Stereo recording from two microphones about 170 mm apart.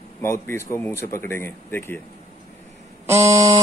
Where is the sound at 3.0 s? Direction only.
15° right (ahead or behind).